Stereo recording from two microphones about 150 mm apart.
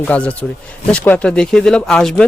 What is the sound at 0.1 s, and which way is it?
Speech, 10° left (ahead or behind).